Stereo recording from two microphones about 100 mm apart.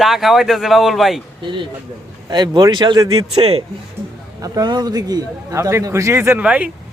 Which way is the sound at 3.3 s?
85° right.